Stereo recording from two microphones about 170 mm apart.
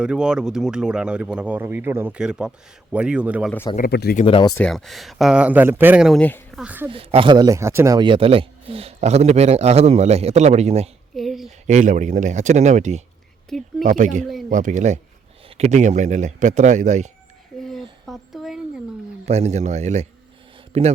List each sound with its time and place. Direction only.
0.0 s speech: 5° right (ahead or behind)
3.8 s speech: 70° left (ahead or behind)
4.2 s speech: 30° left (ahead or behind)
4.5 s speech: 5° left (ahead or behind)
6.1 s speech: 5° left (ahead or behind)
6.6 s speech: 10° right (ahead or behind)
6.9 s speech: 35° right (ahead or behind); by 7.9 s 15° right (ahead or behind)
7.9 s a man's voice: 30° right (ahead or behind)
11.1 s speech: centre (ahead or behind)
11.6 s speech: 45° right (ahead or behind)
13.5 s speech: centre (ahead or behind)
13.8 s speech: 50° right (ahead or behind)
17.6 s a sound: centre (ahead or behind)
19.2 s a man's voice: 40° right (ahead or behind)